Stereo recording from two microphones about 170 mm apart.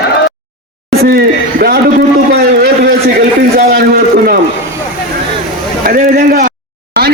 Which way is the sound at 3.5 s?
65° right (ahead or behind).